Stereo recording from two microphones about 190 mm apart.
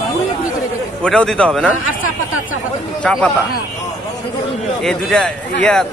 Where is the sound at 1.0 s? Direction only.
5° left (ahead or behind).